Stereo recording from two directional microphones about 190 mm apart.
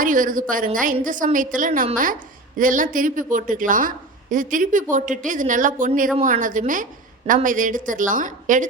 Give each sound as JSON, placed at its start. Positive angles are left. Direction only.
{"t": 0.0, "sound": "a woman's voice", "side_deg": -45}